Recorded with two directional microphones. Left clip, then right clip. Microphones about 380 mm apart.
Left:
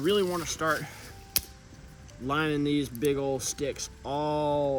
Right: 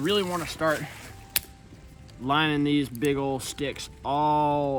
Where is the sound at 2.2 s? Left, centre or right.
Centre.